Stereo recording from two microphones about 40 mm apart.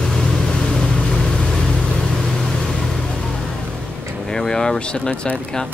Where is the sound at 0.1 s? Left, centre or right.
Centre.